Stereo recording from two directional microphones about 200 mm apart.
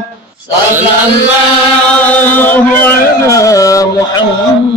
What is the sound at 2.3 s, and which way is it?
Music, 10° left (ahead or behind).